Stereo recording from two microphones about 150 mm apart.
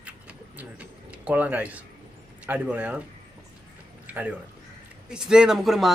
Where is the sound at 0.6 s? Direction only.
10° right (ahead or behind).